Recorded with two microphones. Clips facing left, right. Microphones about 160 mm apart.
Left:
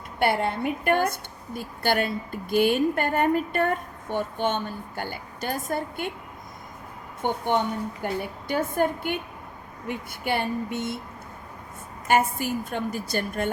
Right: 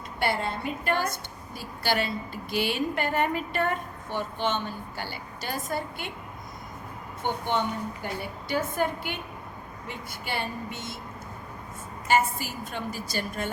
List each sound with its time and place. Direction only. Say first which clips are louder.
0.2 s a woman's voice: left 5 dB; 55° left (ahead or behind)
7.2 s a woman's voice: left 3 dB; 50° left (ahead or behind)
12.0 s a woman's voice: left 2 dB; 55° left (ahead or behind)